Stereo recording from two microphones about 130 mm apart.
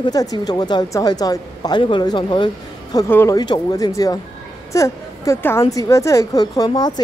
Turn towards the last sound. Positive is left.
turn(degrees=30)  # may be behind; listen again after turning